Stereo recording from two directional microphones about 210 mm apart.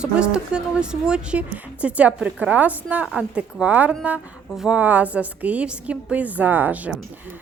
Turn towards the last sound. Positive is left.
turn(degrees=-10)  # may be behind; listen again after turning